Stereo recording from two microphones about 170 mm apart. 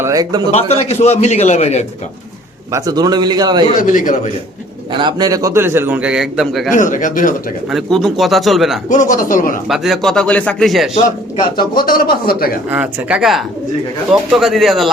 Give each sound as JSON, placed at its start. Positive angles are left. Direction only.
{"t": 0.0, "sound": "a man's voice", "side_deg": -20}
{"t": 0.5, "sound": "a man's voice", "side_deg": 40}
{"t": 2.7, "sound": "a man's voice", "side_deg": -20}
{"t": 3.8, "sound": "speech", "side_deg": 50}
{"t": 4.9, "sound": "a man's voice", "side_deg": -25}
{"t": 6.7, "sound": "speech", "side_deg": 50}
{"t": 7.7, "sound": "a man's voice", "side_deg": 0}
{"t": 8.9, "sound": "speech", "side_deg": 50}
{"t": 9.6, "sound": "a man's voice", "side_deg": 0}
{"t": 11.7, "sound": "a man's voice", "side_deg": 60}
{"t": 12.7, "sound": "a man's voice", "side_deg": -10}